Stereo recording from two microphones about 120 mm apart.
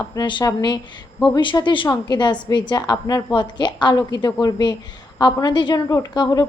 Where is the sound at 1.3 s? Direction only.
40° left (ahead or behind).